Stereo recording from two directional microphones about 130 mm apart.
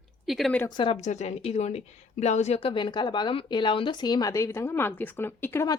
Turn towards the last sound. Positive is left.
turn(degrees=15)  # may be behind; listen again after turning